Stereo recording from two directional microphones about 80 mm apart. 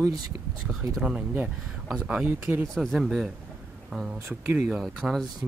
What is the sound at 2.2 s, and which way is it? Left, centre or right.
Speech, right.